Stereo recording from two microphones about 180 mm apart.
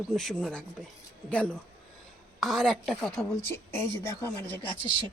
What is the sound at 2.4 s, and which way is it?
Speech, centre (ahead or behind).